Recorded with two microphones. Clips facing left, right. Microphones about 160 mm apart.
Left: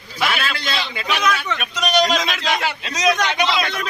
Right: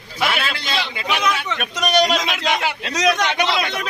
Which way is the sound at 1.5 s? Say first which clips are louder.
Right 1 dB; 55° right (ahead or behind).